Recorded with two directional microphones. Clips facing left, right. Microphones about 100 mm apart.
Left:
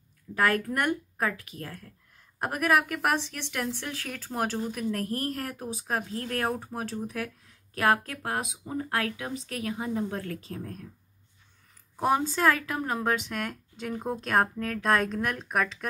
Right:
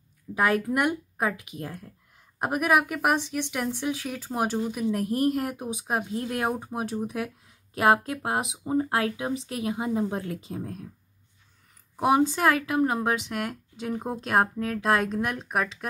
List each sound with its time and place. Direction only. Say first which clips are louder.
0.3 s speech: right 2 dB; 15° right (ahead or behind)
12.0 s speech: right 3 dB; 15° right (ahead or behind)